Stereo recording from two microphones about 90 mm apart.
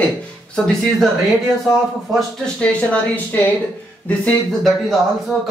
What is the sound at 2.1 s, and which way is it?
Speech, 10° left (ahead or behind).